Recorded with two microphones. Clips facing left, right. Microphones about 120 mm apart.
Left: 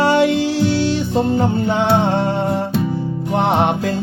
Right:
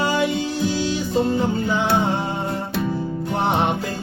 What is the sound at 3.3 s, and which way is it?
Music, 70° left (ahead or behind).